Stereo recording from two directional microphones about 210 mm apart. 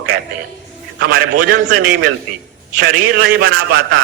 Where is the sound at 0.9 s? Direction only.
55° right (ahead or behind).